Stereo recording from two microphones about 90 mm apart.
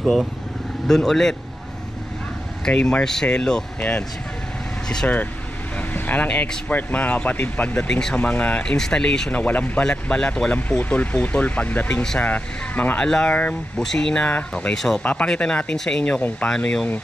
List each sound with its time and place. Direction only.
0.0 s speech: centre (ahead or behind)
2.6 s speech: 10° left (ahead or behind)
5.0 s speech: 20° left (ahead or behind)